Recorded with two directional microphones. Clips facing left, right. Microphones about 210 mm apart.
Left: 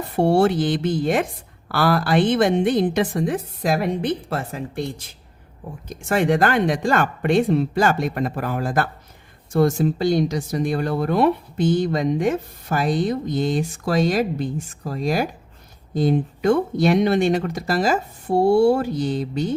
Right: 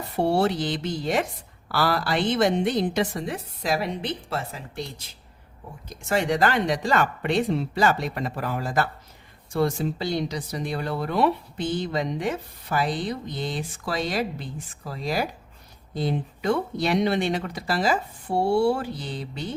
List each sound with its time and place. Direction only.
0.2 s speech: 50° left (ahead or behind)